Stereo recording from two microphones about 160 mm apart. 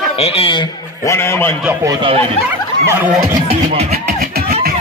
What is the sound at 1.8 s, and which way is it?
Speech, 20° right (ahead or behind).